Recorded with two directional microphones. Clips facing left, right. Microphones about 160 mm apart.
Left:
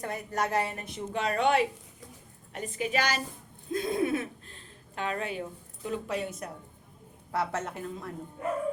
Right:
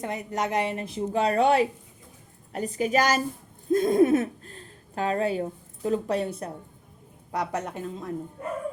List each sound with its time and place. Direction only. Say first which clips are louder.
0.0 s a woman's voice: right 2 dB; 20° right (ahead or behind)
7.3 s a woman's voice: right 2 dB; 15° right (ahead or behind)